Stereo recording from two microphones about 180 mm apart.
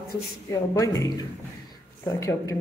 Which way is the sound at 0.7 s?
20° left (ahead or behind).